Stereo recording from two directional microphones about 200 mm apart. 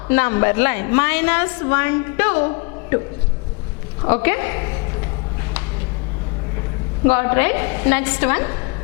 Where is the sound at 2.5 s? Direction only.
20° left (ahead or behind).